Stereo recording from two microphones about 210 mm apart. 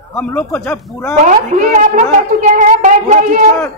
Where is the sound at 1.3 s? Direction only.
35° right (ahead or behind).